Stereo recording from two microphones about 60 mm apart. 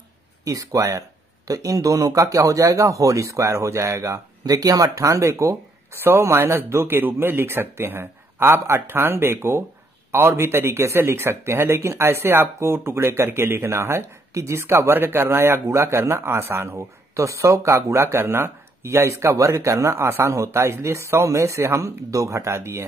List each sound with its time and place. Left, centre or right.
0.5 s speech: right